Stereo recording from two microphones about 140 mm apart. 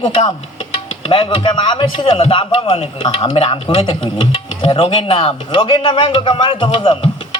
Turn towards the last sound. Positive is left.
turn(degrees=40)  # may be behind; listen again after turning